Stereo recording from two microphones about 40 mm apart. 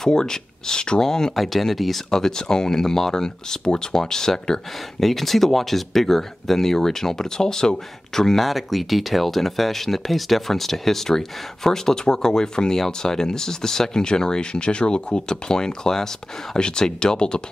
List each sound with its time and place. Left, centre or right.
0.0 s speech: centre
1.3 s speech: centre
5.0 s speech: centre
8.4 s speech: centre; by 17.4 s left